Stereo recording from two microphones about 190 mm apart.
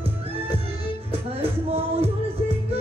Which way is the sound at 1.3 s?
30° right (ahead or behind).